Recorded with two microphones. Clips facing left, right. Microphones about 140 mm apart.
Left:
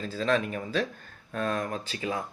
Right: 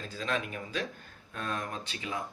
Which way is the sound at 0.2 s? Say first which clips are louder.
Left 7 dB; 40° left (ahead or behind).